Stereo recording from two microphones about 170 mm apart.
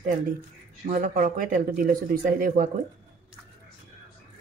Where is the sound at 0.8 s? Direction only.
55° right (ahead or behind).